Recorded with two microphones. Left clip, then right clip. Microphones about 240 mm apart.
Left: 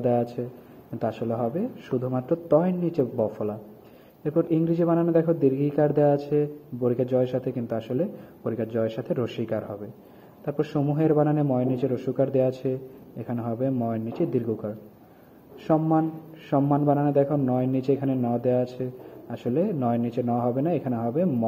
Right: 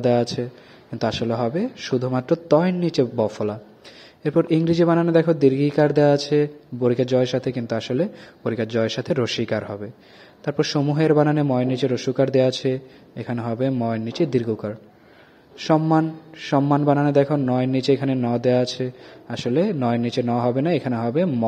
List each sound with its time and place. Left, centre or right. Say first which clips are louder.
0.0 s a man's voice: right 5 dB; right